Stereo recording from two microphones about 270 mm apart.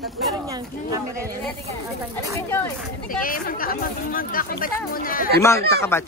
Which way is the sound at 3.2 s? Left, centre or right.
Left.